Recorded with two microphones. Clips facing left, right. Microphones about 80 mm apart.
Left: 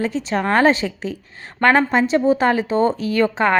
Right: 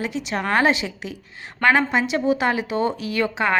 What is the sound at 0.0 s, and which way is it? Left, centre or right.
A woman's voice, left.